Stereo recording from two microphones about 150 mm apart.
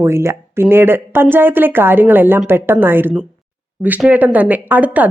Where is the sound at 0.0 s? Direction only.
20° right (ahead or behind).